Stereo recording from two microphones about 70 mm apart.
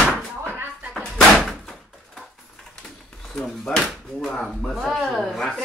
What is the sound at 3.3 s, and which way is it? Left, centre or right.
Speech, centre.